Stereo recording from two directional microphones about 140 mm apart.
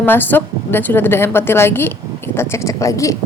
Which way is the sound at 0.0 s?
15° left (ahead or behind).